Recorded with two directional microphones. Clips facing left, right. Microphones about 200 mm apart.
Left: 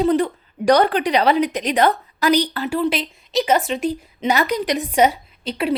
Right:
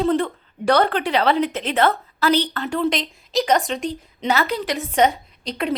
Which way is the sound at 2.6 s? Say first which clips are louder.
Left 1 dB; 5° left (ahead or behind).